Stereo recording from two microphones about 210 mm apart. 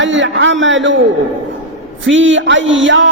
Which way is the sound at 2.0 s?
65° right (ahead or behind).